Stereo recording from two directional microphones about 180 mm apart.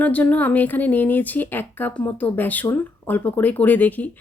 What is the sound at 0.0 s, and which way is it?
Speech, 10° left (ahead or behind).